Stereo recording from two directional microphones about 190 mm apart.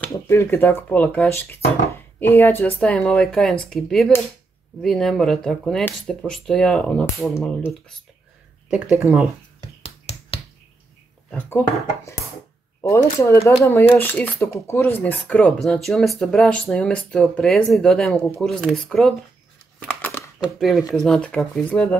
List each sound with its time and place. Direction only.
0.0 s speech: 10° left (ahead or behind)
9.0 s speech: 5° right (ahead or behind)
9.8 s finger snapping: 30° left (ahead or behind)
11.3 s speech: 10° left (ahead or behind)
12.9 s speech: 15° left (ahead or behind)
20.0 s crumpling: 10° left (ahead or behind)
20.3 s speech: centre (ahead or behind)